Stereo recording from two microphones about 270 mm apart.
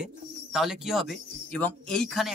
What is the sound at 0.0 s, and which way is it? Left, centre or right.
Speech, centre.